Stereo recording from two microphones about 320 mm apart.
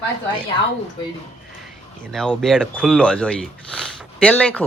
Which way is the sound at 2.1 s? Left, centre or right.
Centre.